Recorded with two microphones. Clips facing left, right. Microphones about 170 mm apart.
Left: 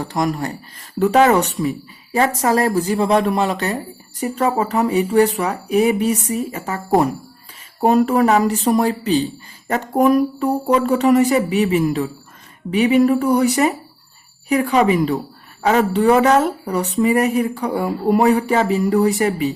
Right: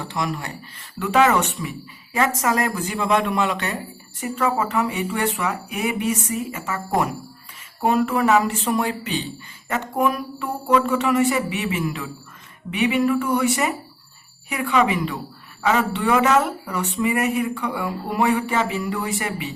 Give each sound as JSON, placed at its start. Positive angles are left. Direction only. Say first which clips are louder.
{"t": 0.0, "sound": "speech", "louder": "left 6 dB", "side_deg": 40}